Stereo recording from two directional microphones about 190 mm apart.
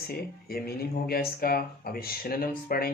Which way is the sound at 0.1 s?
55° left (ahead or behind).